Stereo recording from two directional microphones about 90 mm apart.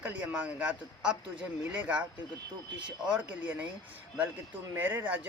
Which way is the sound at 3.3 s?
20° right (ahead or behind).